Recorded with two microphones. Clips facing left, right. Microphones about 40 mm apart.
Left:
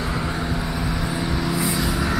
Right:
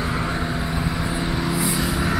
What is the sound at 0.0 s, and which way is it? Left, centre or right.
Vehicle, centre.